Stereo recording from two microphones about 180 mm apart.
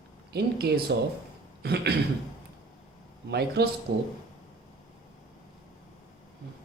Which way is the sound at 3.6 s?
65° right (ahead or behind).